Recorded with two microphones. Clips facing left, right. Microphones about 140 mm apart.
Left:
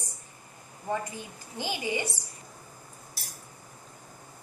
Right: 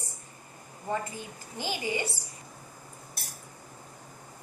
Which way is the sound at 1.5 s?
15° left (ahead or behind).